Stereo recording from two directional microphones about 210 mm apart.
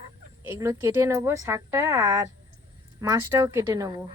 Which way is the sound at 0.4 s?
15° right (ahead or behind).